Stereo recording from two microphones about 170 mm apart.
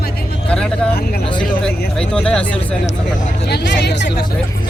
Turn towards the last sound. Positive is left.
turn(degrees=90)